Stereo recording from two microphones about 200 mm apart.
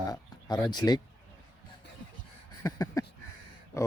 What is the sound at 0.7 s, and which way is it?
Speech, 20° left (ahead or behind).